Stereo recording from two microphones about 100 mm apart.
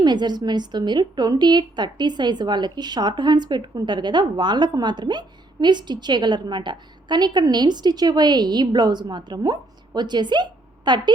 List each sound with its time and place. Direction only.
0.0 s a woman's voice: 45° right (ahead or behind)